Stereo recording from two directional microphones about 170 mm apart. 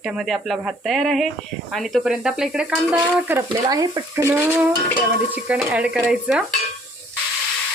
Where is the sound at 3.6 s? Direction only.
25° right (ahead or behind); by 6.4 s 5° right (ahead or behind).